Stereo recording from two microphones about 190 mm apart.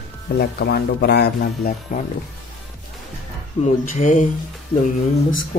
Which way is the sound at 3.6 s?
40° left (ahead or behind).